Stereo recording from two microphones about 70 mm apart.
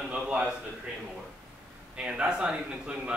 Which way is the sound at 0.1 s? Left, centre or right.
Centre.